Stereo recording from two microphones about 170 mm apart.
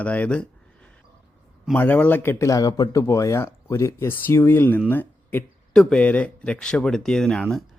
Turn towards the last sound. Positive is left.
turn(degrees=0)  # may be behind; listen again after turning